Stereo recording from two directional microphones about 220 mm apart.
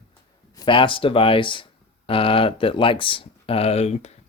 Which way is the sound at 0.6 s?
25° left (ahead or behind).